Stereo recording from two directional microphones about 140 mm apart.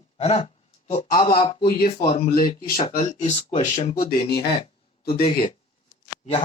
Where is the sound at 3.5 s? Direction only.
50° left (ahead or behind).